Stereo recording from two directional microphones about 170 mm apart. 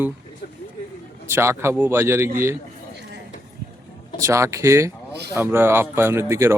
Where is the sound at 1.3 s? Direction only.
15° right (ahead or behind).